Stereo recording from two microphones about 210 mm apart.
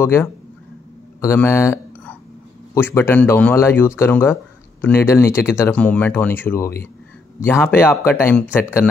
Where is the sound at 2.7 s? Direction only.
10° left (ahead or behind).